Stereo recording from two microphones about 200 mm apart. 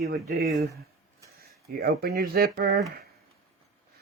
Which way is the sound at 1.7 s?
50° right (ahead or behind).